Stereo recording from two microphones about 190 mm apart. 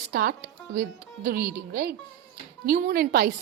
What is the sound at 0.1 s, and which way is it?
Speech, 55° right (ahead or behind).